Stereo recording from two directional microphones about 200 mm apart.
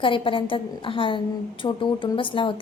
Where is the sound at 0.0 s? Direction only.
25° left (ahead or behind).